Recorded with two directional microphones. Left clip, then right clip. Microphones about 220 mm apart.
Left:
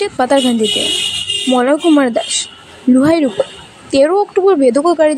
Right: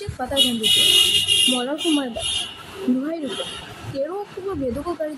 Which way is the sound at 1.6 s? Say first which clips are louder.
Left 12 dB; 35° left (ahead or behind).